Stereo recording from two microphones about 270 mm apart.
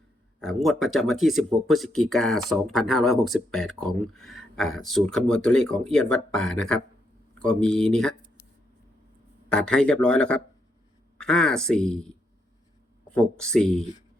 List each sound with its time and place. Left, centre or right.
0.3 s speech: centre
9.5 s speech: centre